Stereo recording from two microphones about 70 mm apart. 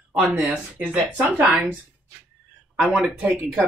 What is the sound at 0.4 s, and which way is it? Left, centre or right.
Speech, right.